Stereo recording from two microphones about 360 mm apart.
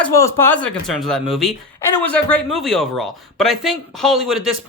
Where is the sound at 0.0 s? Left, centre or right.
Centre.